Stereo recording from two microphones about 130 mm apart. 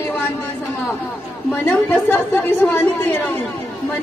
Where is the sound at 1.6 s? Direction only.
10° left (ahead or behind).